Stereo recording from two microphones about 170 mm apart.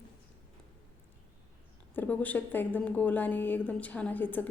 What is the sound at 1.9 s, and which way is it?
A woman's voice, 10° left (ahead or behind).